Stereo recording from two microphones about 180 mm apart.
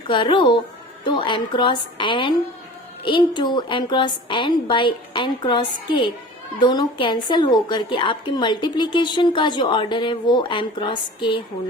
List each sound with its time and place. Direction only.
0.1 s a woman's voice: 25° left (ahead or behind)